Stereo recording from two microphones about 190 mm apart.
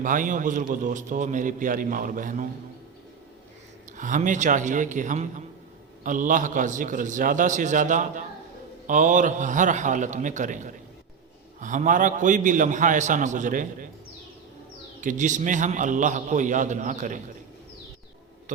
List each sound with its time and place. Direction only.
0.0 s a man's voice: 45° right (ahead or behind)
3.9 s a man's voice: 40° right (ahead or behind)
15.0 s a man's voice: 40° right (ahead or behind)